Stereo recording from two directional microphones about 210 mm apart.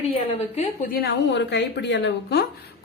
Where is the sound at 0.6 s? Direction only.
40° left (ahead or behind).